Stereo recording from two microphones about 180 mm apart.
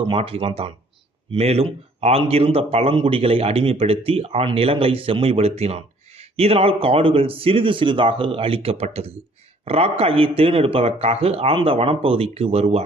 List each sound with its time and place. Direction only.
0.1 s speech: 30° right (ahead or behind)